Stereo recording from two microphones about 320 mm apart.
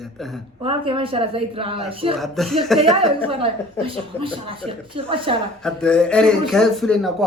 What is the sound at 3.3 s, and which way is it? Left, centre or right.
A woman's voice, centre.